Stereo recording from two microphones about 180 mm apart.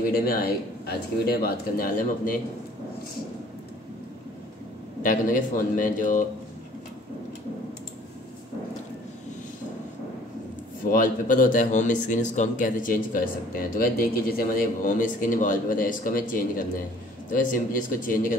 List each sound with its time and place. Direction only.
0.1 s speech: 55° left (ahead or behind)
5.0 s speech: 50° left (ahead or behind)
10.9 s speech: 50° left (ahead or behind)